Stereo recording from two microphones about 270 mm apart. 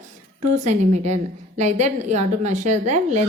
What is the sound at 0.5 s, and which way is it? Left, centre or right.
A woman's voice, right.